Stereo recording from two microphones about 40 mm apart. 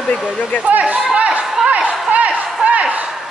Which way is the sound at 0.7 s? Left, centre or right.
Right.